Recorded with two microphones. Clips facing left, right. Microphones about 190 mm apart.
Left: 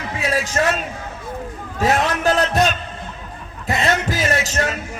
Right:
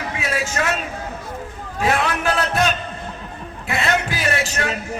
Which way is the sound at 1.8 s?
40° left (ahead or behind).